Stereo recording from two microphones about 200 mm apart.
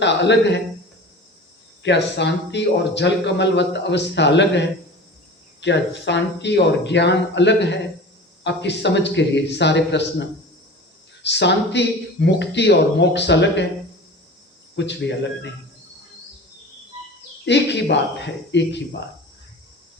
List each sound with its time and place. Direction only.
0.0 s a man's voice: 60° left (ahead or behind)
1.8 s a man's voice: 60° left (ahead or behind)
14.8 s a man's voice: 60° left (ahead or behind)
17.4 s a man's voice: 60° left (ahead or behind)